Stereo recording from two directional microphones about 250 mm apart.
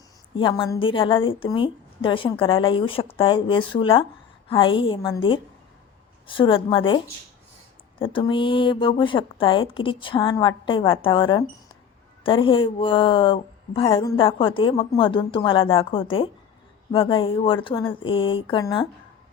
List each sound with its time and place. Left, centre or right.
0.3 s speech: centre